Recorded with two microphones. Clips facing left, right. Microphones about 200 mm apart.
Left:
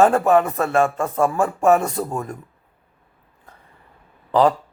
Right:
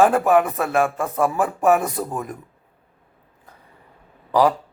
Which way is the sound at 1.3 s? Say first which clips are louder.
Left 1 dB; 15° right (ahead or behind).